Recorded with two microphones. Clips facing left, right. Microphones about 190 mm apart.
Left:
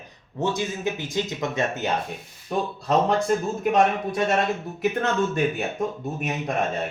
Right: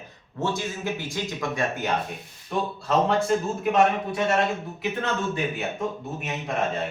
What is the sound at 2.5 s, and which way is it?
Speech, 40° left (ahead or behind).